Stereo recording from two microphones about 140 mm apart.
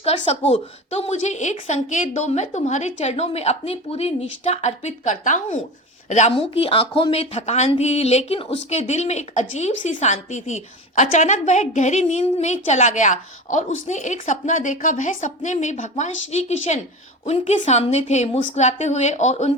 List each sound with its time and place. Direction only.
0.0 s a woman's voice: 45° left (ahead or behind)
6.3 s a woman's voice: 45° left (ahead or behind)